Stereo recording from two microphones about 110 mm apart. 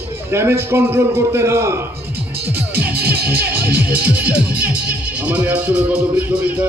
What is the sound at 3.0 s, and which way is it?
Music, 15° right (ahead or behind).